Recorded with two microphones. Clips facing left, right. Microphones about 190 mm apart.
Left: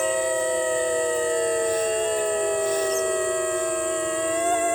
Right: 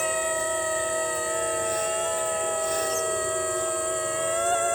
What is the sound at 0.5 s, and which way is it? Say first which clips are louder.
Civil defense siren: left 5 dB; 15° left (ahead or behind).